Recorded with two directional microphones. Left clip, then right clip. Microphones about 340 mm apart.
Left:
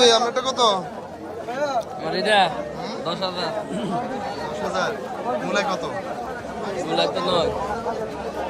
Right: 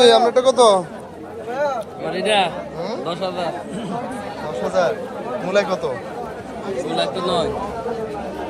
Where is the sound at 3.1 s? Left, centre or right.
Left.